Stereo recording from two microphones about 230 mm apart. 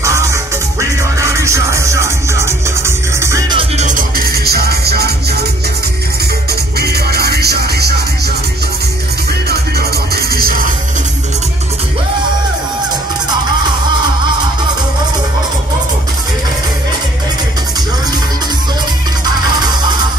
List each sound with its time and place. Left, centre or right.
0.0 s music: centre; by 5.1 s right
6.8 s music: right
9.5 s music: right